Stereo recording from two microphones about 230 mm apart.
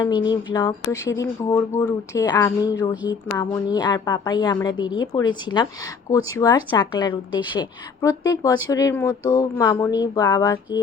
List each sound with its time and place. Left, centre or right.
0.0 s speech: centre